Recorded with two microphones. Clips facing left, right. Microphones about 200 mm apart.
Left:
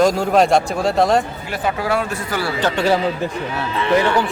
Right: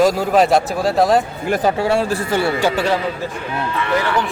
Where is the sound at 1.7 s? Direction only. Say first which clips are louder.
Right 4 dB; 30° right (ahead or behind).